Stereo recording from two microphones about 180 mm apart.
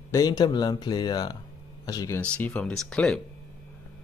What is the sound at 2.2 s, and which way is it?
Speech, 5° left (ahead or behind).